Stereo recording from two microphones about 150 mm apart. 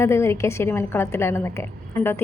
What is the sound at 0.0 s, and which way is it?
A woman's voice, 20° left (ahead or behind).